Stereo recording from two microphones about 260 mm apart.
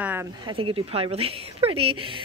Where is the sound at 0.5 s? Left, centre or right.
Right.